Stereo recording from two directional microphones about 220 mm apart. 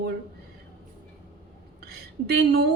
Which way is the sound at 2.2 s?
45° right (ahead or behind).